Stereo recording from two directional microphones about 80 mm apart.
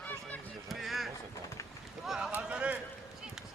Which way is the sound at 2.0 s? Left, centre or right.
Centre.